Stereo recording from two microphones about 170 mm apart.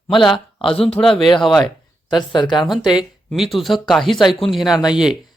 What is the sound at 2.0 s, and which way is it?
Speech, 25° left (ahead or behind).